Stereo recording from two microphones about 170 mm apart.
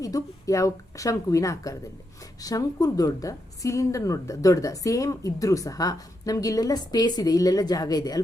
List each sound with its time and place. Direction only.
0.0 s a woman's voice: 20° left (ahead or behind)